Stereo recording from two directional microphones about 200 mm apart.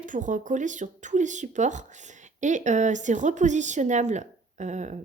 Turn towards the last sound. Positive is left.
turn(degrees=-35)  # may be behind; listen again after turning